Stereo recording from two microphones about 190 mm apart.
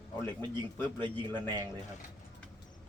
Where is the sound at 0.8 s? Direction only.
25° right (ahead or behind).